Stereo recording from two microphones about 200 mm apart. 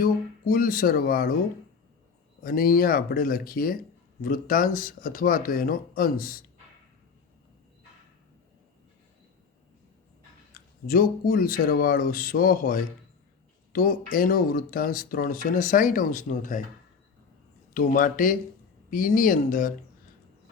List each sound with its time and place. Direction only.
0.0 s speech: 45° left (ahead or behind)
2.4 s speech: 45° left (ahead or behind)
10.8 s speech: 45° left (ahead or behind)
17.7 s speech: 40° left (ahead or behind)